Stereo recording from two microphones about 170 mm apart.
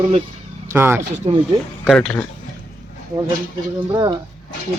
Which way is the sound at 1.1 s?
40° right (ahead or behind).